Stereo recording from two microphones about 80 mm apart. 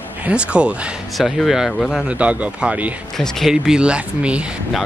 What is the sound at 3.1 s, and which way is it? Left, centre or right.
Speech, centre.